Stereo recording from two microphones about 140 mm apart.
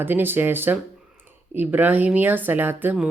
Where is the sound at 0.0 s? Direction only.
15° right (ahead or behind).